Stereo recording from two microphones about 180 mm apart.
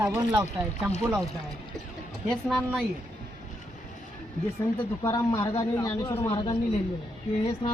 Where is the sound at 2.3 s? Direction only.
5° left (ahead or behind).